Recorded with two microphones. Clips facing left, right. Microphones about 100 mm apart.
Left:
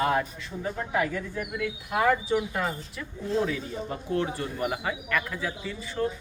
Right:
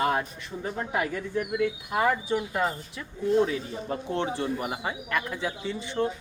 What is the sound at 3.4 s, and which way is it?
Speech, 30° right (ahead or behind).